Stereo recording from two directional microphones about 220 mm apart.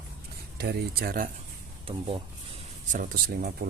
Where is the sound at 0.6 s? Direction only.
45° right (ahead or behind).